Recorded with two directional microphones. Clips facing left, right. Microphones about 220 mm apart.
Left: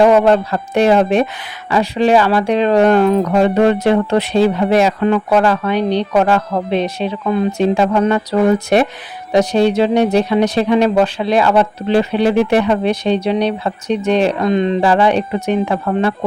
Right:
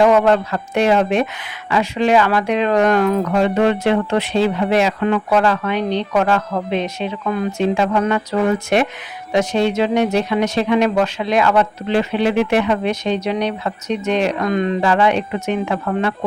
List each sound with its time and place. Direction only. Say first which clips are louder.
0.0 s speech: left 3 dB; 35° left (ahead or behind)
3.3 s speech: left 2 dB; 40° left (ahead or behind)